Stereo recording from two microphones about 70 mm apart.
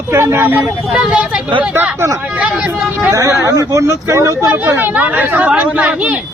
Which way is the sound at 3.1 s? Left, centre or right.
Right.